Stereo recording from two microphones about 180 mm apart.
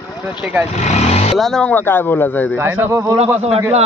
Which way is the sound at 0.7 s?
40° left (ahead or behind).